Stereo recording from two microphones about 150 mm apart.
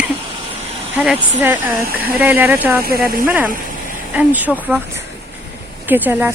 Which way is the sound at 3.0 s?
15° right (ahead or behind).